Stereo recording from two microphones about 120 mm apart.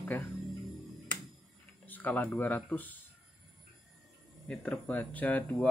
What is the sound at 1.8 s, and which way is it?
Speech, 15° left (ahead or behind).